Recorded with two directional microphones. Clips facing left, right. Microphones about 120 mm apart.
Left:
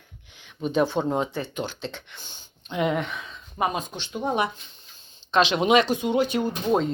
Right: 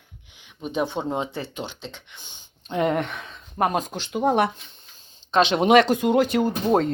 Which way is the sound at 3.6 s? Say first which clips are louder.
Right 3 dB; 75° right (ahead or behind).